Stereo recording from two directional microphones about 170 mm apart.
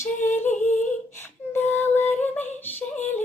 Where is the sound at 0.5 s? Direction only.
45° left (ahead or behind).